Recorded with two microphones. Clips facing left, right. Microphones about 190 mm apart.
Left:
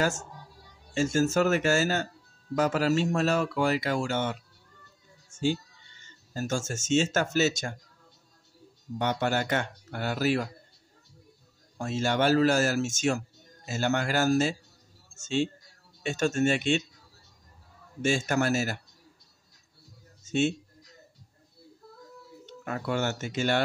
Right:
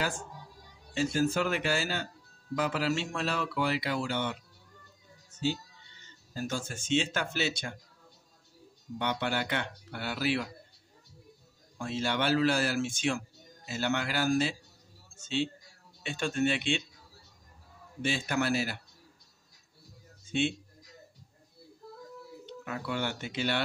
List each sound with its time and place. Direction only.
0.0 s speech: 45° left (ahead or behind)
8.9 s speech: 45° left (ahead or behind)
11.8 s speech: 45° left (ahead or behind)
18.0 s speech: 45° left (ahead or behind)
20.2 s speech: 45° left (ahead or behind)
22.5 s speech: 45° left (ahead or behind)